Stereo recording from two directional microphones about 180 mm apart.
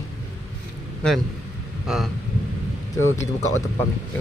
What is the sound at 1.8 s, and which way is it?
Thunder, centre (ahead or behind).